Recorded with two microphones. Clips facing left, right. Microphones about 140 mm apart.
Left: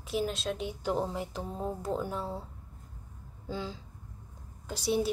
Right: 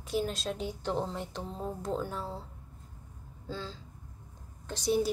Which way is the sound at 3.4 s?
15° left (ahead or behind).